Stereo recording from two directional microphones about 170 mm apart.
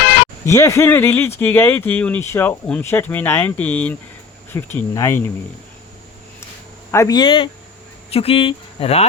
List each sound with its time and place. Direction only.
0.4 s speech: 15° left (ahead or behind)
6.9 s speech: 20° left (ahead or behind); by 9.0 s 35° left (ahead or behind)